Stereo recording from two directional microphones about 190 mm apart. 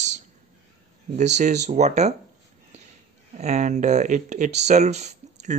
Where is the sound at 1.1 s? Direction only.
40° right (ahead or behind).